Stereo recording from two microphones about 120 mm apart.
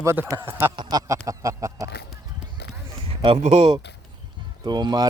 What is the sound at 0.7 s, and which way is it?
Speech, 35° right (ahead or behind).